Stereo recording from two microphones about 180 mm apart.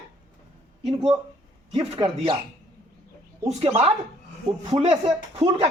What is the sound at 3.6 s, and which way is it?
Speech, 30° right (ahead or behind).